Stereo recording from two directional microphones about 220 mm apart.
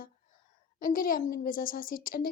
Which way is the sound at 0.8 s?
40° left (ahead or behind).